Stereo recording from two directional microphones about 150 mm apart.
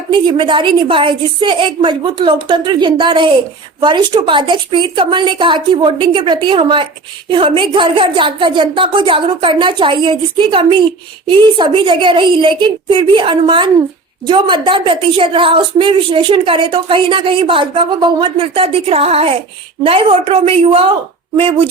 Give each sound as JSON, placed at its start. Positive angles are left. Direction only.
{"t": 0.1, "sound": "a woman's voice", "side_deg": -30}